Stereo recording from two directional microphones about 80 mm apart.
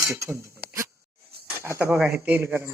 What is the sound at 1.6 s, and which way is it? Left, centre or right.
Speech, right.